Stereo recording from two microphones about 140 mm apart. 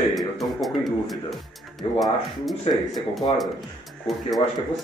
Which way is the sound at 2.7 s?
45° left (ahead or behind).